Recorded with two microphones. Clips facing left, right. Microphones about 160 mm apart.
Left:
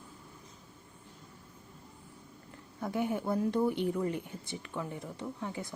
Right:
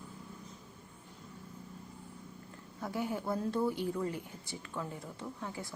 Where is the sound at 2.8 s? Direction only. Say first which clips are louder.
Left 4 dB; 20° left (ahead or behind).